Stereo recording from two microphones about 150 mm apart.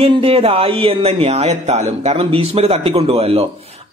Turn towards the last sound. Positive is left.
turn(degrees=-40)  # may be behind; listen again after turning